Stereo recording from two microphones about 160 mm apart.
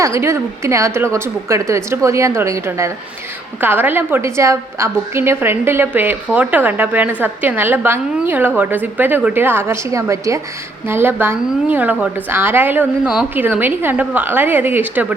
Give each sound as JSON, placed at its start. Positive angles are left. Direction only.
{"t": 0.0, "sound": "a woman's voice", "side_deg": -20}